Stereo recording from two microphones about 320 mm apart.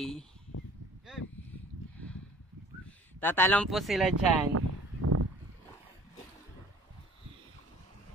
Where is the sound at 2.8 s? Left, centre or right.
Centre.